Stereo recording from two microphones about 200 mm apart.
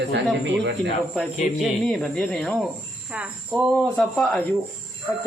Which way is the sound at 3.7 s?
5° left (ahead or behind).